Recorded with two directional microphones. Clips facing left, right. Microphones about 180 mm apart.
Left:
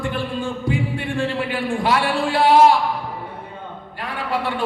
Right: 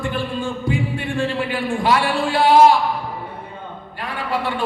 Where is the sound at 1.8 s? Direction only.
60° left (ahead or behind).